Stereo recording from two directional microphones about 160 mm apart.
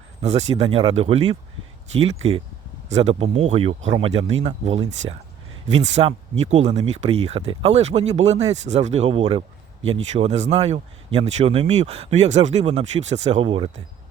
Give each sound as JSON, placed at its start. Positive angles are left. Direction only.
{"t": 0.2, "sound": "speech", "side_deg": -45}
{"t": 2.9, "sound": "speech", "side_deg": -40}